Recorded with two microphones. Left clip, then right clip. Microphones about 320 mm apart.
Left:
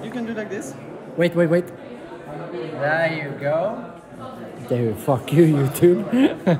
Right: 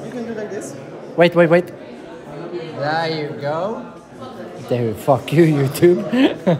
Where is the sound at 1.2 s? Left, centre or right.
Centre.